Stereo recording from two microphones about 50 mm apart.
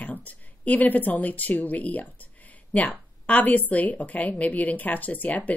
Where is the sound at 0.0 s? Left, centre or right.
Left.